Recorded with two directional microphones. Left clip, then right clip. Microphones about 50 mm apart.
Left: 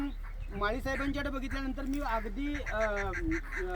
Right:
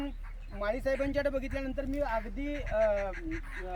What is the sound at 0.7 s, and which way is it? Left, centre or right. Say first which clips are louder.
Speech: right 4 dB; right.